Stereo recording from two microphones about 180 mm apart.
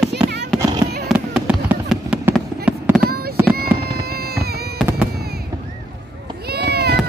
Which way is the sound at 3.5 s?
60° right (ahead or behind).